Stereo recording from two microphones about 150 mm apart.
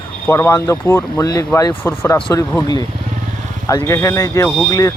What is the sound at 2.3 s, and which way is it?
Speech, 25° left (ahead or behind).